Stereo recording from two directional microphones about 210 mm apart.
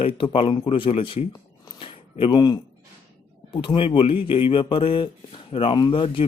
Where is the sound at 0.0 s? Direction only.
25° left (ahead or behind).